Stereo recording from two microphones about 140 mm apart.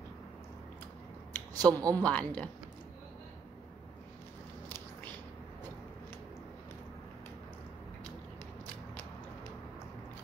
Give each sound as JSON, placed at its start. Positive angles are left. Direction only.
{"t": 1.5, "sound": "speech", "side_deg": -25}
{"t": 2.0, "sound": "speech", "side_deg": 10}
{"t": 4.6, "sound": "biting", "side_deg": 15}